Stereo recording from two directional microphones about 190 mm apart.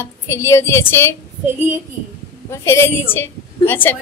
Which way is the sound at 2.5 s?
15° left (ahead or behind).